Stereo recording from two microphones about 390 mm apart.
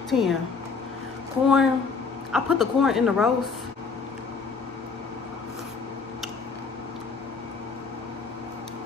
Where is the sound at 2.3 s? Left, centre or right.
Centre.